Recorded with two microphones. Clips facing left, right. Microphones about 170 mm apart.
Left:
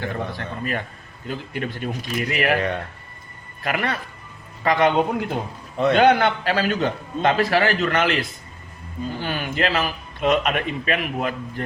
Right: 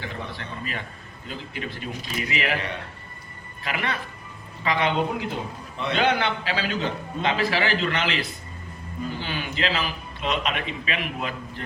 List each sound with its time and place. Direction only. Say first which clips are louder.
0.0 s a man's voice: left 6 dB; 50° left (ahead or behind)
9.2 s a man's voice: left 6 dB; 50° left (ahead or behind)